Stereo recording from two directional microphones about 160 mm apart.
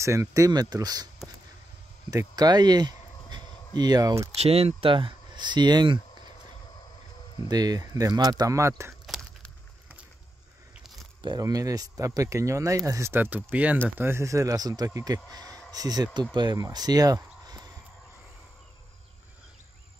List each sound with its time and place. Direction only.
0.0 s speech: 20° right (ahead or behind)
2.0 s speech: 25° right (ahead or behind)
4.4 s speech: 40° right (ahead or behind)
7.4 s speech: 25° right (ahead or behind)
9.0 s a sound: centre (ahead or behind)
10.7 s biting: centre (ahead or behind)
11.1 s speech: 25° right (ahead or behind)
15.3 s a sound: 25° right (ahead or behind)
15.7 s speech: 25° right (ahead or behind)